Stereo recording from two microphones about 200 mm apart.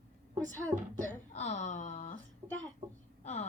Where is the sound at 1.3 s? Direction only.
35° left (ahead or behind).